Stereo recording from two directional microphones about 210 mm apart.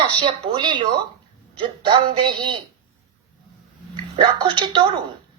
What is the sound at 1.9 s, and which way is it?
Speech, 25° right (ahead or behind).